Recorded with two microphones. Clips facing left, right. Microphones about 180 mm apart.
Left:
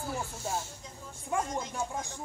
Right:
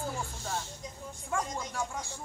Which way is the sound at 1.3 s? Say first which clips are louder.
Left 2 dB; 20° left (ahead or behind).